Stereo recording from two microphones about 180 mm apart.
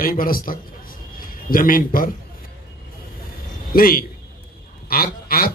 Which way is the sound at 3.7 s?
55° left (ahead or behind).